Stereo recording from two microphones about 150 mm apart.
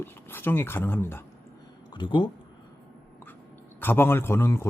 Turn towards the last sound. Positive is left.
turn(degrees=15)  # may be behind; listen again after turning